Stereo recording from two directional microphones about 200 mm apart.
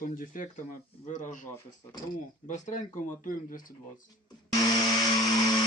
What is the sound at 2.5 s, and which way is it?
Speech, 40° left (ahead or behind).